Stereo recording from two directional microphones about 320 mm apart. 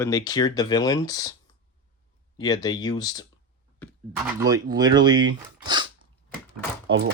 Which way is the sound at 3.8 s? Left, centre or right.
Centre.